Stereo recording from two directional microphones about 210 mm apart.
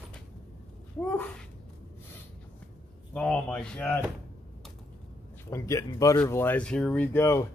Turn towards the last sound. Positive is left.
turn(degrees=15)  # may be behind; listen again after turning